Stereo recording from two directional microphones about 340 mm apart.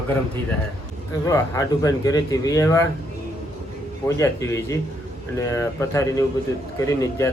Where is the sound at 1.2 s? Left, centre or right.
Centre.